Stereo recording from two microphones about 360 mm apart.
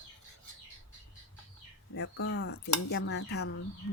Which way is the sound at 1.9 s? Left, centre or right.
Left.